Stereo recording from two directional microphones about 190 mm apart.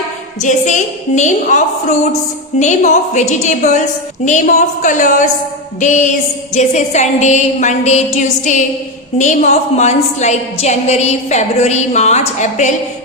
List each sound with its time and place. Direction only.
0.4 s a woman's voice: 40° left (ahead or behind)